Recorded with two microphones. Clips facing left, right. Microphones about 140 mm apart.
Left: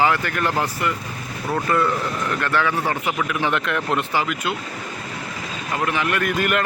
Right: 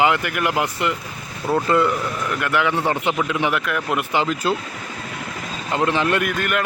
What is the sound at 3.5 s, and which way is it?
Speech, 5° right (ahead or behind).